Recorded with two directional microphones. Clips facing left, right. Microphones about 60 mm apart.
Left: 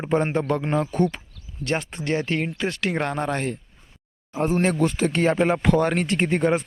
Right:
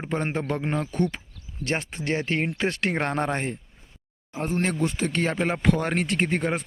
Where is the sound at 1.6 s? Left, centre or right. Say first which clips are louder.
Left 2 dB; right.